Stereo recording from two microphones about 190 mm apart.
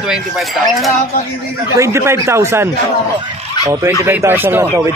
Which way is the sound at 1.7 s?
15° right (ahead or behind).